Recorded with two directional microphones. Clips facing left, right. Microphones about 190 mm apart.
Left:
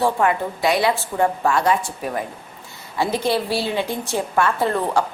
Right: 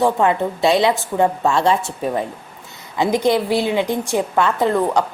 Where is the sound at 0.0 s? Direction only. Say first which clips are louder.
Right 3 dB; 25° right (ahead or behind).